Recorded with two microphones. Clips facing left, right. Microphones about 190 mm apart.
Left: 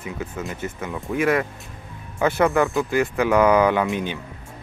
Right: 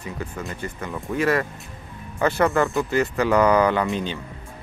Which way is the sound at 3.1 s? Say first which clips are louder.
Left 1 dB; 15° left (ahead or behind).